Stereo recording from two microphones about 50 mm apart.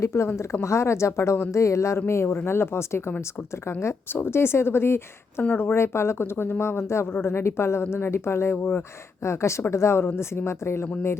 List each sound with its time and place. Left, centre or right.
0.0 s a woman's voice: left
2.0 s speech: left
5.4 s speech: left
5.7 s speech: left
9.2 s a woman's voice: left